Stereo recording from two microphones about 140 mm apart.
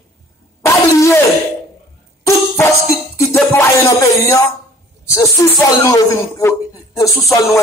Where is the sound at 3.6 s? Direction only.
20° left (ahead or behind).